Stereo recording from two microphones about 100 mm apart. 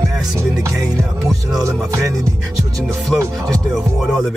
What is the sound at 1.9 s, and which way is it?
Music, 35° right (ahead or behind).